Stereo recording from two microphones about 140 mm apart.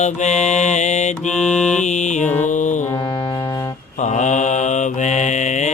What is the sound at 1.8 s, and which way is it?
Mantra, 60° left (ahead or behind).